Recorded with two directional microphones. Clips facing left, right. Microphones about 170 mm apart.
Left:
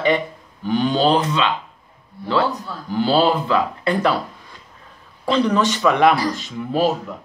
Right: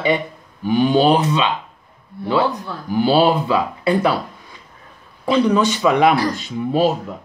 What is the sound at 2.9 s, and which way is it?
Speech, 10° right (ahead or behind).